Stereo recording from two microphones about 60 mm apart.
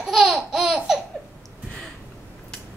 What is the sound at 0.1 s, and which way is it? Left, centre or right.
Laughter, centre.